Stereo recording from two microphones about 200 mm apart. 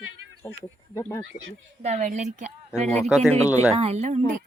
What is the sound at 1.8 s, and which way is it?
Speech, 35° right (ahead or behind).